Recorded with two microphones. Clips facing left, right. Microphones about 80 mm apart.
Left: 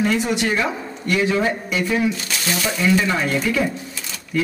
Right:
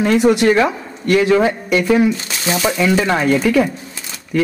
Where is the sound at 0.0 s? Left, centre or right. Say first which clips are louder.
Right 7 dB; right.